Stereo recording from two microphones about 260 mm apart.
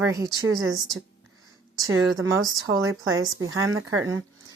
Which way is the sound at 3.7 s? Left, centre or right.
Right.